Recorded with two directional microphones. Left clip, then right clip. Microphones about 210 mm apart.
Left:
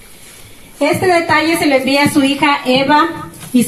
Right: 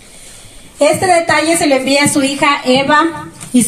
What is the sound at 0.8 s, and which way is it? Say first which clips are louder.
A woman's voice: right 2 dB; 55° right (ahead or behind).